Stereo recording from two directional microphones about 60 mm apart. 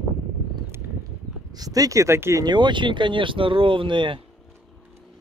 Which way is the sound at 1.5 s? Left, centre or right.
Right.